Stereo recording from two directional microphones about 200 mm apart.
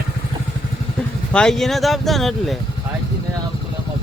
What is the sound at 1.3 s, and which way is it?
Speech, 5° left (ahead or behind).